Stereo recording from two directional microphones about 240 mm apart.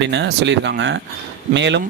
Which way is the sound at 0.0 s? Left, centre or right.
Right.